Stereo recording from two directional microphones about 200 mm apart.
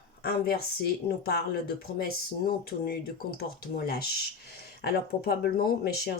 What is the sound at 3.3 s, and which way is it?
Speech, 50° left (ahead or behind).